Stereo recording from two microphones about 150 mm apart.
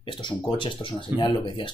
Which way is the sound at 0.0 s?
35° left (ahead or behind).